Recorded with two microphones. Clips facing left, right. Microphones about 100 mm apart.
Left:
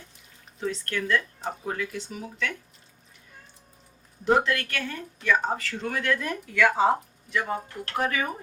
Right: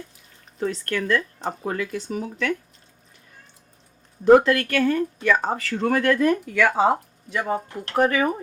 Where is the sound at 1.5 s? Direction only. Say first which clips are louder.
Right 4 dB; 80° right.